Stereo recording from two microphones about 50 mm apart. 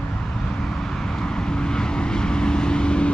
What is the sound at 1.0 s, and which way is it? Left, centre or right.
Vehicle, centre.